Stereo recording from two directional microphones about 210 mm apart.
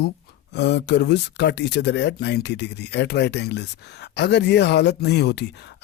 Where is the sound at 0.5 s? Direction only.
55° left (ahead or behind).